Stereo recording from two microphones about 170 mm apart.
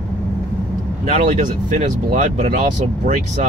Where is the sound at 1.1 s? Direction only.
50° right (ahead or behind).